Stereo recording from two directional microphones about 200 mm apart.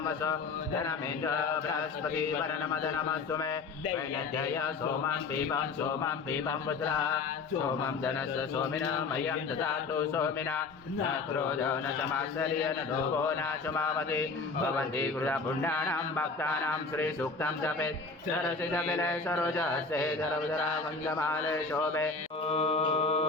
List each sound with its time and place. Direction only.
0.8 s speech: 15° left (ahead or behind)
10.1 s speech: 10° left (ahead or behind)
13.2 s speech: 10° left (ahead or behind)
21.2 s speech: 10° left (ahead or behind)
22.4 s mantra: 30° left (ahead or behind)